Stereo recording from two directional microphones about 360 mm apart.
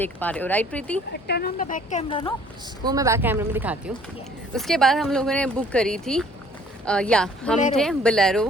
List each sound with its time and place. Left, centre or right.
0.0 s speech: centre
1.1 s speech: left
2.8 s speech: centre